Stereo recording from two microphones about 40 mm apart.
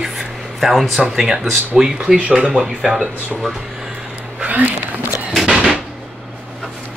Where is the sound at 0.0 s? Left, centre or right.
Centre.